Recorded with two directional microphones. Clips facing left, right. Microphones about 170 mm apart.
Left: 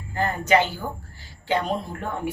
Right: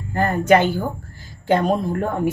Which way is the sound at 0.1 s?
55° right (ahead or behind).